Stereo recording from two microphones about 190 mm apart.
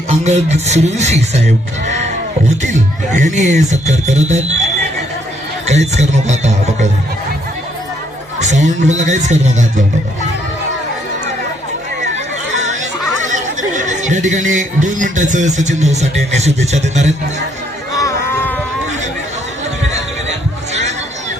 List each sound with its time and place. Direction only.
0.1 s speech: 35° right (ahead or behind)
2.6 s speech: 40° right (ahead or behind)
8.4 s speech: 40° right (ahead or behind)
12.5 s a sound: 40° right (ahead or behind)
13.2 s speech: 40° right (ahead or behind)
18.0 s a sound: 10° left (ahead or behind)